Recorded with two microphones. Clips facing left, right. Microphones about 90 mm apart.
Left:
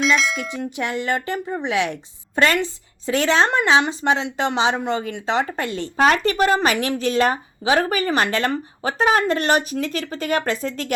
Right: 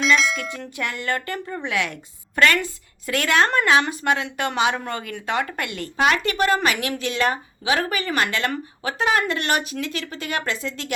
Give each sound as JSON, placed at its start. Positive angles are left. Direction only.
{"t": 0.0, "sound": "speech", "side_deg": 0}
{"t": 0.4, "sound": "speech", "side_deg": 20}